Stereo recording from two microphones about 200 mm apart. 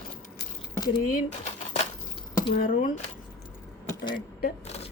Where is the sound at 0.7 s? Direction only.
20° left (ahead or behind).